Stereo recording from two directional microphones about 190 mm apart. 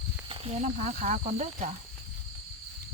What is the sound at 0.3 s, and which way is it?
Speech, 35° right (ahead or behind).